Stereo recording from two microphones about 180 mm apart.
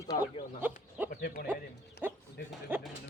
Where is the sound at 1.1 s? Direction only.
60° left (ahead or behind).